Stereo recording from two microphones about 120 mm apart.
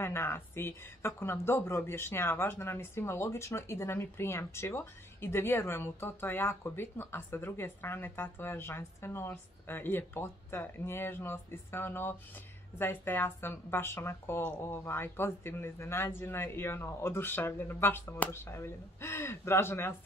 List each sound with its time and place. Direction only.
0.0 s speech: 20° left (ahead or behind)